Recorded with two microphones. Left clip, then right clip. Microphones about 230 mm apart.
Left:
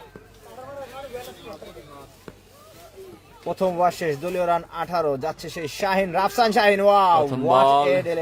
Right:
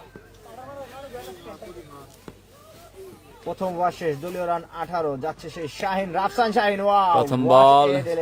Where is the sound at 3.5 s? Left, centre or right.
Left.